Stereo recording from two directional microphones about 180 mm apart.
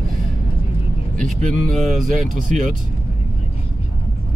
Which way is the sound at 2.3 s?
45° right (ahead or behind).